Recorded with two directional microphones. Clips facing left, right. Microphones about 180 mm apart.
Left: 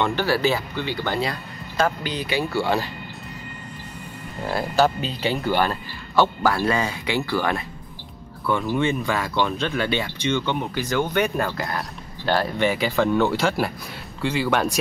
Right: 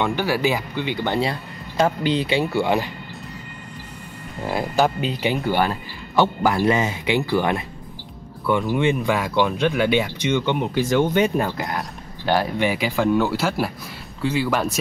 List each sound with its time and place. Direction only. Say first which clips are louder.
0.0 s speech: even; 10° right (ahead or behind)
4.5 s speech: even; 15° right (ahead or behind)
8.7 s speech: right 2 dB; 15° right (ahead or behind)